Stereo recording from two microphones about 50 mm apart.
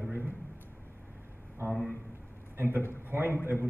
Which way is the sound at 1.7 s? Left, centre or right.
Centre.